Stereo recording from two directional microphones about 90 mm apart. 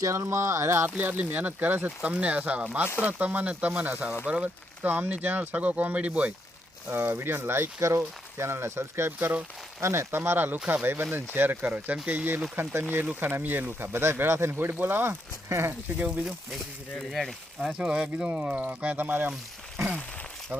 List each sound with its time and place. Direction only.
0.0 s speech: 30° right (ahead or behind); by 6.3 s 15° right (ahead or behind)
6.9 s speech: 25° right (ahead or behind)
16.0 s speech: 10° right (ahead or behind)
17.7 s speech: 10° right (ahead or behind)